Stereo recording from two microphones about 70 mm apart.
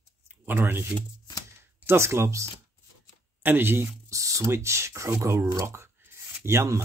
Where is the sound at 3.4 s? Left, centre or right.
Right.